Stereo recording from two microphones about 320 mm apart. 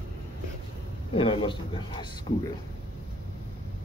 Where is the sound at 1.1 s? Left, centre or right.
Centre.